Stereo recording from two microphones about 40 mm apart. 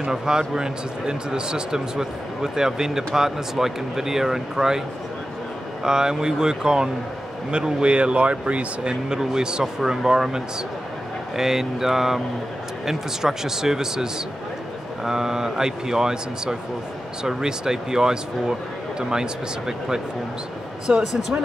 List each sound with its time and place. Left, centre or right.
0.1 s speech: centre
5.9 s speech: centre
9.1 s speech: centre
15.0 s speech: centre
21.1 s speech: centre